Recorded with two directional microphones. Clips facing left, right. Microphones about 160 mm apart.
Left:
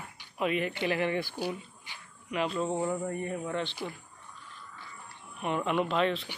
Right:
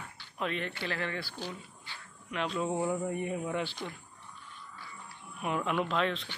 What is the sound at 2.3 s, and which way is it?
Speech, 5° left (ahead or behind).